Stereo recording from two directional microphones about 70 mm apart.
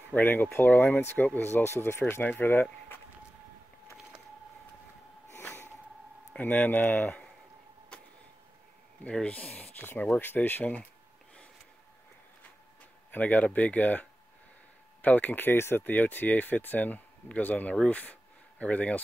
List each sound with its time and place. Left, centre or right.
0.1 s speech: left
5.4 s snort: left
6.3 s speech: left
9.0 s speech: centre
13.1 s speech: left